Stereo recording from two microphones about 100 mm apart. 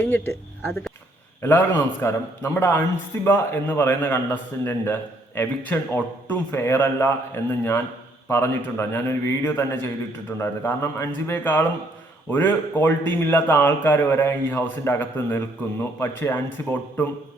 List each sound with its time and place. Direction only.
0.0 s a man's voice: 20° left (ahead or behind)